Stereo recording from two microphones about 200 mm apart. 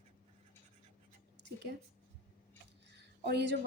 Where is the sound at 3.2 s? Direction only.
60° right (ahead or behind).